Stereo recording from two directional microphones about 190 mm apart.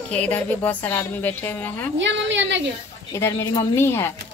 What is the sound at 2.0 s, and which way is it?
Speech, 70° right (ahead or behind).